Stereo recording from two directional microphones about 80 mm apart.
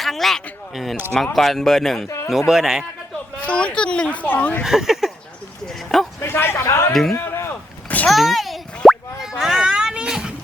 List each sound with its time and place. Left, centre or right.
0.0 s speech: centre
2.0 s speech: left
2.5 s speech: centre
3.4 s speech: centre
4.6 s speech: centre
5.6 s bow-wow: centre
6.2 s speech: left
6.9 s speech: centre
7.2 s a sound: left
8.0 s plop: centre